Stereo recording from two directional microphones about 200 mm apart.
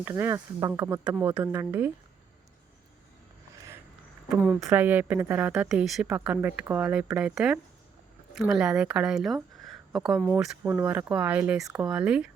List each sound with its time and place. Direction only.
0.0 s a woman's voice: 10° right (ahead or behind)
4.3 s a woman's voice: 10° right (ahead or behind)